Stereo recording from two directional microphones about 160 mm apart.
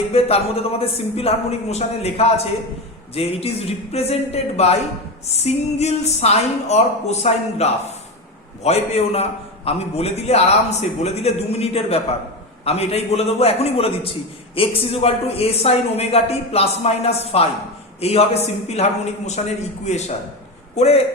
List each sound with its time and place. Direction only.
0.1 s a man's voice: 40° left (ahead or behind)